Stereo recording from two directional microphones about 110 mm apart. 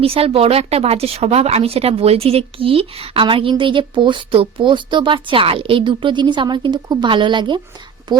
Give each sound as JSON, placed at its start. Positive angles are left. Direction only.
{"t": 0.0, "sound": "a woman's voice", "side_deg": -60}